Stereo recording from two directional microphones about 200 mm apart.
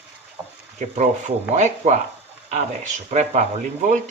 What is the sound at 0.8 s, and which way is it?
Speech, 35° right (ahead or behind).